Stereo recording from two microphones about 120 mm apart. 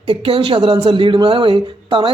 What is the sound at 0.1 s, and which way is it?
Speech, 50° right (ahead or behind).